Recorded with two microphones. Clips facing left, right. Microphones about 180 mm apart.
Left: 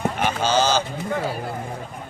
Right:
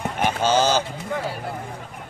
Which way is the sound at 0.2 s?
50° right (ahead or behind).